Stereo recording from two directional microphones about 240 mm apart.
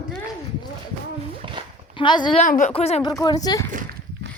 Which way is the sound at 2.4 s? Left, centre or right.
Left.